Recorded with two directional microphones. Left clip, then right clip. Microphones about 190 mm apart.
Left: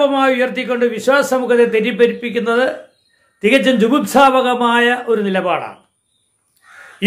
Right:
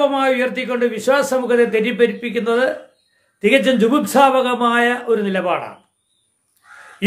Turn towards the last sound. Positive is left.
turn(degrees=15)  # may be behind; listen again after turning